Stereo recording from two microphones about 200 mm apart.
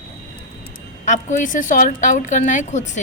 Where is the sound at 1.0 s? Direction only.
40° left (ahead or behind).